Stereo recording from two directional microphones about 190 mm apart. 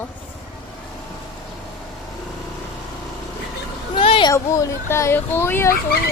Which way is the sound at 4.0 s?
25° left (ahead or behind).